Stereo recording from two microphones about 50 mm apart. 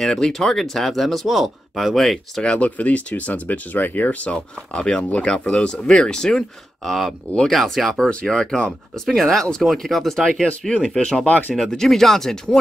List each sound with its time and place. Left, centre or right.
0.0 s speech: centre
2.4 s speech: left; by 8.1 s centre
8.3 s speech: centre
11.2 s speech: left
11.5 s speech: centre